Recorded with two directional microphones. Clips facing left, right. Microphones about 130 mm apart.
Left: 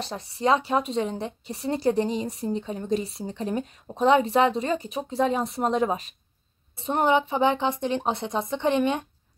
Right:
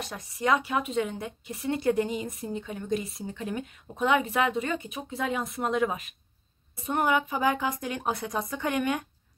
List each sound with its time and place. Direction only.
0.0 s a woman's voice: 30° left (ahead or behind)